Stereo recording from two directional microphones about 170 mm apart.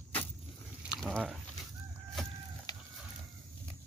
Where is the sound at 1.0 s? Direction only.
Centre (ahead or behind).